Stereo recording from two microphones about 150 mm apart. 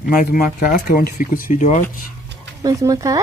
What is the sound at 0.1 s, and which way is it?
Speech, 65° left (ahead or behind).